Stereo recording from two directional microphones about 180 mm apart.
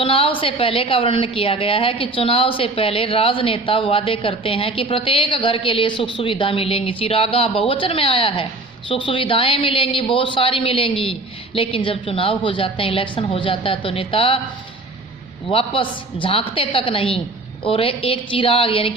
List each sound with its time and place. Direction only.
0.0 s a woman's voice: 30° left (ahead or behind)
15.4 s a woman's voice: 30° left (ahead or behind)